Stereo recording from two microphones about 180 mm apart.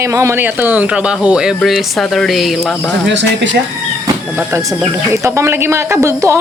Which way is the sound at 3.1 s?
90° right.